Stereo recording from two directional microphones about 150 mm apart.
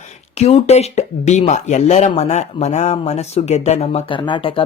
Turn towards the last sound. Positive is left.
turn(degrees=35)  # may be behind; listen again after turning